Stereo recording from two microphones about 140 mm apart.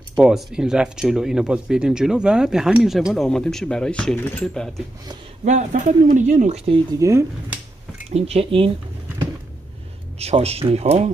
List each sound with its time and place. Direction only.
0.1 s speech: 5° right (ahead or behind)
5.4 s speech: 60° right (ahead or behind)
7.0 s speech: 20° right (ahead or behind)
8.1 s speech: 45° right (ahead or behind)
10.1 s speech: 50° right (ahead or behind)